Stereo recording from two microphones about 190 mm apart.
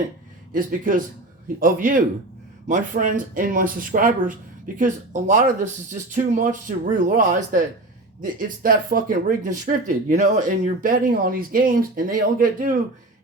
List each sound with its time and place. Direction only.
0.5 s speech: 45° right (ahead or behind)